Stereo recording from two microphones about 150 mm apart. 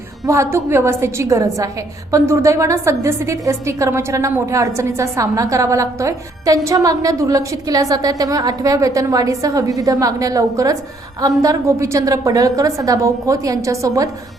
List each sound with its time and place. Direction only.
0.3 s a woman's voice: 15° right (ahead or behind)